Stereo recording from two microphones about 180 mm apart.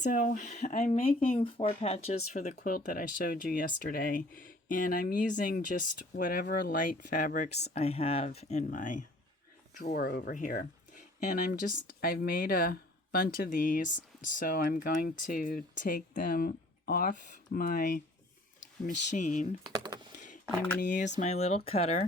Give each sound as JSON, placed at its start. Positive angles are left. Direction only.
{"t": 0.0, "sound": "speech", "side_deg": 50}
{"t": 9.7, "sound": "speech", "side_deg": 55}
{"t": 11.9, "sound": "speech", "side_deg": 55}
{"t": 19.1, "sound": "speech", "side_deg": 45}
{"t": 19.6, "sound": "speech", "side_deg": -25}
{"t": 20.1, "sound": "a sound", "side_deg": 45}
{"t": 20.8, "sound": "speech", "side_deg": 45}